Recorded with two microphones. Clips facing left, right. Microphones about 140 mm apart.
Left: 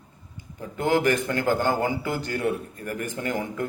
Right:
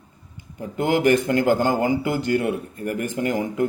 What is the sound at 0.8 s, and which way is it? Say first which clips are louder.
Speech: right 3 dB; 50° right (ahead or behind).